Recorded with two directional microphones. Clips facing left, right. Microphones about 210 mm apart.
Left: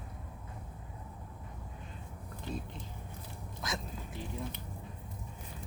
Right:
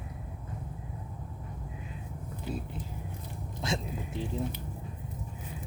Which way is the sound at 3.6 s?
25° right (ahead or behind).